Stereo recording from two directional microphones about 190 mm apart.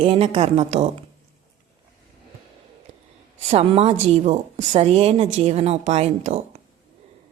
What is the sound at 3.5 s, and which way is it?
A woman's voice, 30° right (ahead or behind).